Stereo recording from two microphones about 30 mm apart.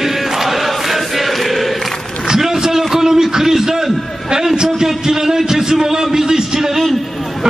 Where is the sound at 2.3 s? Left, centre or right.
Centre.